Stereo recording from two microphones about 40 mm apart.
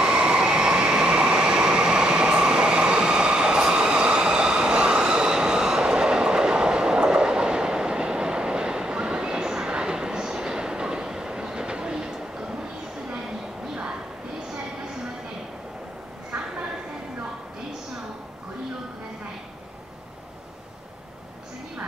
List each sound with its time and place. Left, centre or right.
0.0 s train: right